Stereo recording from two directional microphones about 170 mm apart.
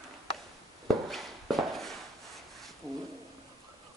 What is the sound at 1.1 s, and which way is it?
Walk, centre (ahead or behind).